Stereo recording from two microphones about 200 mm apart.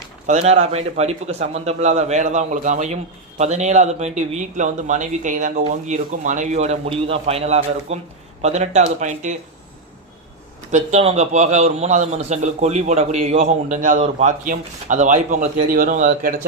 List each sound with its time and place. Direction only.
0.3 s a man's voice: 35° right (ahead or behind)
10.7 s a man's voice: 35° right (ahead or behind)